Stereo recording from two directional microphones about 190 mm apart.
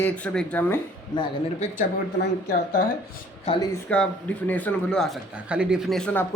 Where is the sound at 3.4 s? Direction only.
30° left (ahead or behind).